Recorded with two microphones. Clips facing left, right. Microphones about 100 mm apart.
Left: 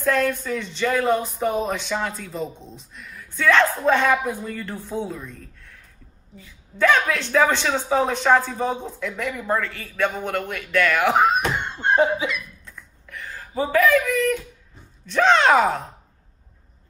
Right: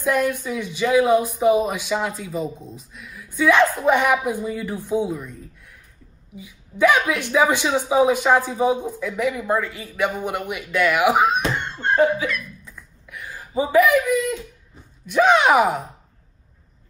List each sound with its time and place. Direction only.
0.0 s speech: 15° right (ahead or behind)
11.2 s speech: centre (ahead or behind)
11.6 s laughter: 15° left (ahead or behind)
12.6 s a sound: 10° right (ahead or behind)
15.0 s speech: 10° right (ahead or behind)